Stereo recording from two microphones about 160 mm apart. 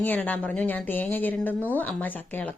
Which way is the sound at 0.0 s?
10° left (ahead or behind).